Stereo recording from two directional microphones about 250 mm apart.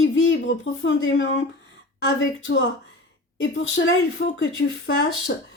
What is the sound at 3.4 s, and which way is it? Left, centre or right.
Speech, left.